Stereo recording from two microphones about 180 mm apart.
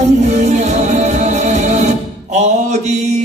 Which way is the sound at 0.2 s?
40° right (ahead or behind).